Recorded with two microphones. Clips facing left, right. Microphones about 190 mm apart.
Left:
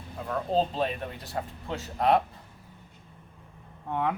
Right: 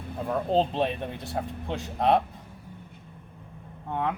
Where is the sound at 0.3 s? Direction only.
25° right (ahead or behind).